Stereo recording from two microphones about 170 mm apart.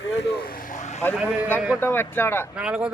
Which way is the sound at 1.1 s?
10° right (ahead or behind).